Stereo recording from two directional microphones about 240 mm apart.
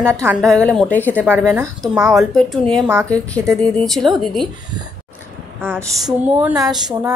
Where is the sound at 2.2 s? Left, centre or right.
Centre.